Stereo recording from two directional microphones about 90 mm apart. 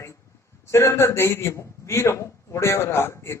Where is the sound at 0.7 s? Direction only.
30° left (ahead or behind).